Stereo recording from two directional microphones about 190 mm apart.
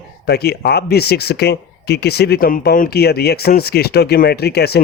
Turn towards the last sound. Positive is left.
turn(degrees=55)  # may be behind; listen again after turning